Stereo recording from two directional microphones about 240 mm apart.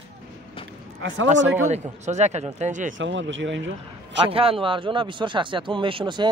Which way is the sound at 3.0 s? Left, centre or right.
Right.